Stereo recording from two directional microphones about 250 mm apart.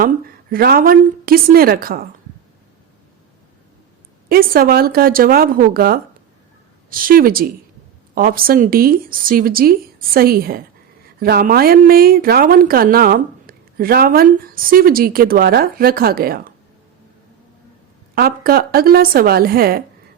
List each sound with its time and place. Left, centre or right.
0.5 s a woman's voice: right
4.3 s a woman's voice: right
18.1 s a woman's voice: right